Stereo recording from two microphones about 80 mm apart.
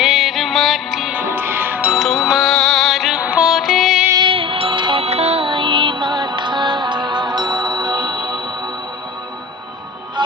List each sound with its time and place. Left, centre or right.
0.0 s music: centre
1.1 s music: right
1.9 s music: centre
3.2 s music: centre
3.5 s music: centre
4.2 s music: right
10.2 s music: right